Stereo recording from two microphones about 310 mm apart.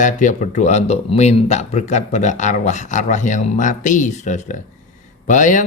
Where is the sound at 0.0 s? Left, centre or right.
Left.